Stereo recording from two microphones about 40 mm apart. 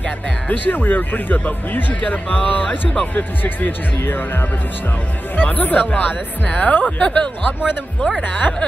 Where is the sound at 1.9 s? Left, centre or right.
Left.